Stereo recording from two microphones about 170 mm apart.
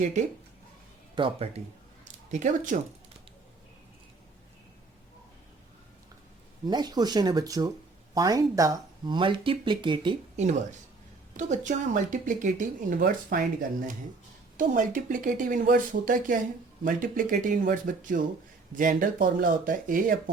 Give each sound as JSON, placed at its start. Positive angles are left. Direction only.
{"t": 0.0, "sound": "speech", "side_deg": -45}
{"t": 1.1, "sound": "speech", "side_deg": -35}
{"t": 2.0, "sound": "speech", "side_deg": -45}
{"t": 6.7, "sound": "speech", "side_deg": -25}
{"t": 10.3, "sound": "speech", "side_deg": -40}